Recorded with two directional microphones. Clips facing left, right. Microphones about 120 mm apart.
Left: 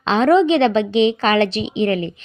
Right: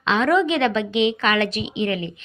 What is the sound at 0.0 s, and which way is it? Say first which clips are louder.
A woman's voice: left 5 dB; 30° left (ahead or behind).